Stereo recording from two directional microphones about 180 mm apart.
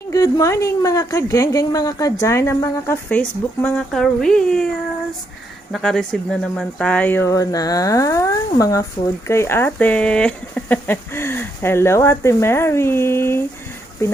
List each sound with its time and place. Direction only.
0.1 s a woman's voice: 20° left (ahead or behind); by 4.7 s 5° left (ahead or behind)
5.7 s speech: 5° left (ahead or behind)